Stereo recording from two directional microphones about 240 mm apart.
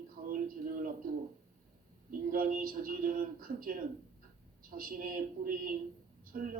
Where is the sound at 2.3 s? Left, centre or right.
Right.